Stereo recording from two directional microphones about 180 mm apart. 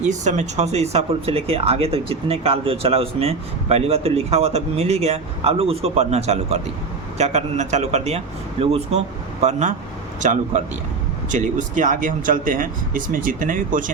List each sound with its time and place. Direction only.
0.1 s speech: 40° right (ahead or behind)